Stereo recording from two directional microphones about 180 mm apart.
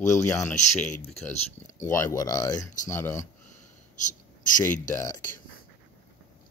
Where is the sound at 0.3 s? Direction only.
15° left (ahead or behind).